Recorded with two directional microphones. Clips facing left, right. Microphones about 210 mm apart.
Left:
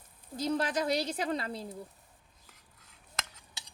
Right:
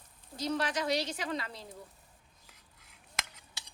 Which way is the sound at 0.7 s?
35° left (ahead or behind).